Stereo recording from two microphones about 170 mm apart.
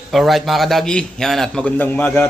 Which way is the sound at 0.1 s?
Centre (ahead or behind).